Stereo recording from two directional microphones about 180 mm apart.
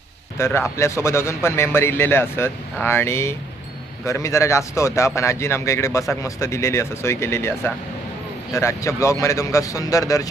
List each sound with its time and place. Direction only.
0.3 s a man's voice: 15° left (ahead or behind)